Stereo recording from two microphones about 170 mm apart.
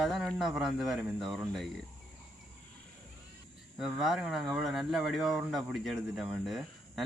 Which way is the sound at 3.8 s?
Centre (ahead or behind).